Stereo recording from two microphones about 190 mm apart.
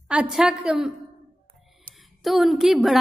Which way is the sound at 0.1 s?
5° right (ahead or behind).